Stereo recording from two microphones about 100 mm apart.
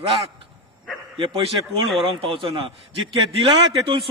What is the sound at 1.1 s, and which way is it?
A man's voice, 55° right (ahead or behind).